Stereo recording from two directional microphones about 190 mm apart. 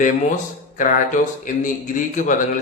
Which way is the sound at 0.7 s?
45° left (ahead or behind).